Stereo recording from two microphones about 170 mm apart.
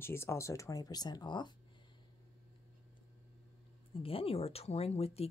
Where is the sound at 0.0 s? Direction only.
15° left (ahead or behind).